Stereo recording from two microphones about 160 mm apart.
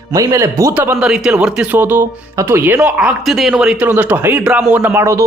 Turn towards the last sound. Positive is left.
turn(degrees=-20)  # may be behind; listen again after turning